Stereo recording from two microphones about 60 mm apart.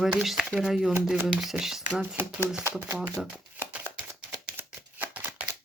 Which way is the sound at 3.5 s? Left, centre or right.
Right.